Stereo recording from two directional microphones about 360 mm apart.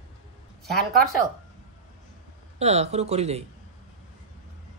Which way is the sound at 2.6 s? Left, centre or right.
Centre.